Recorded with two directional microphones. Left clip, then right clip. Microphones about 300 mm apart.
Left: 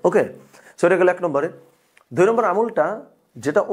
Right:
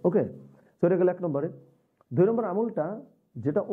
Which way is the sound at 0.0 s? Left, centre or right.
Centre.